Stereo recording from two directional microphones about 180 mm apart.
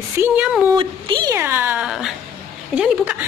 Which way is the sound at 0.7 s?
25° right (ahead or behind).